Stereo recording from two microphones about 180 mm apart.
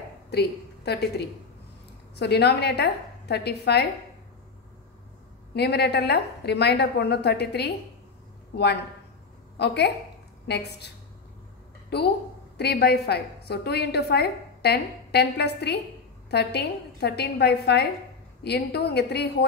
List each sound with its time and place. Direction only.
0.3 s a woman's voice: 65° left (ahead or behind)
5.5 s a woman's voice: 65° left (ahead or behind)
9.6 s a woman's voice: 70° left (ahead or behind)
11.9 s a woman's voice: 65° left (ahead or behind)